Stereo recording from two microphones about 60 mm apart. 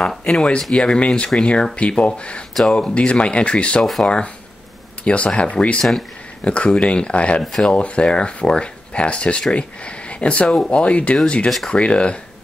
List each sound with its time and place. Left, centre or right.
0.2 s speech: centre
3.8 s speech: centre
5.0 s speech: centre